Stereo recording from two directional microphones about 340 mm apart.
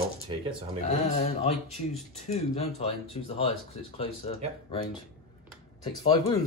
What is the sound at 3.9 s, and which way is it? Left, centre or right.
Speech, centre.